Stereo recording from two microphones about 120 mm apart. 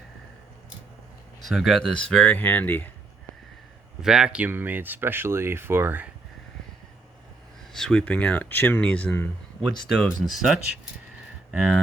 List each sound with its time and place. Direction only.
1.4 s speech: centre (ahead or behind); by 2.9 s 15° left (ahead or behind)
4.0 s speech: 5° right (ahead or behind)
7.7 s speech: 5° left (ahead or behind)
9.6 s speech: centre (ahead or behind)